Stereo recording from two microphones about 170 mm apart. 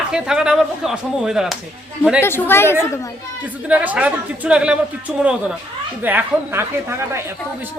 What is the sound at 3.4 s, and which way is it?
A woman's voice, 10° right (ahead or behind).